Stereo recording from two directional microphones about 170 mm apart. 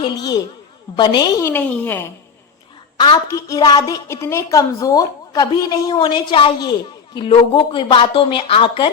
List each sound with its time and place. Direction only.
0.0 s a woman's voice: 25° left (ahead or behind)
1.5 s speech: 10° left (ahead or behind)
3.0 s a woman's voice: 25° left (ahead or behind)